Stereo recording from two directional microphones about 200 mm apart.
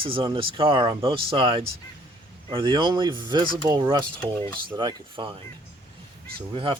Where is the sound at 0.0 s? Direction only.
25° right (ahead or behind).